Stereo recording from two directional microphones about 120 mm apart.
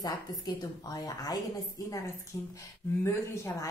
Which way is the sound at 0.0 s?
35° left (ahead or behind).